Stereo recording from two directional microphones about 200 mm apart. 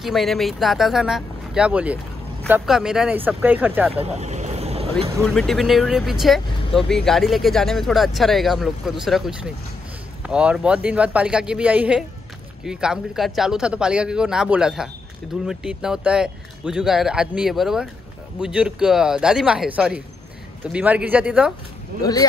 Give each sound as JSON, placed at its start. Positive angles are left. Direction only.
{"t": 0.0, "sound": "speech", "side_deg": 0}
{"t": 3.9, "sound": "vehicle", "side_deg": -30}
{"t": 5.2, "sound": "speech", "side_deg": 5}